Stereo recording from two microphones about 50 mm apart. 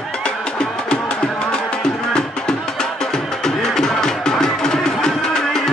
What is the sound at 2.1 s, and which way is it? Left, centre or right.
Music, centre.